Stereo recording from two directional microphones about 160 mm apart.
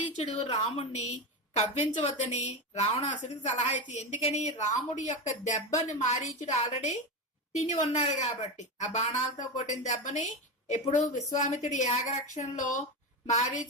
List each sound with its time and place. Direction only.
0.2 s a woman's voice: 40° left (ahead or behind)